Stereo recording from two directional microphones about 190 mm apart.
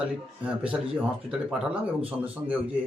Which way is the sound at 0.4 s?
5° right (ahead or behind).